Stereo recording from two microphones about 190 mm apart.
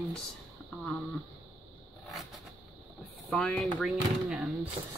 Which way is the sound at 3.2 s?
5° left (ahead or behind).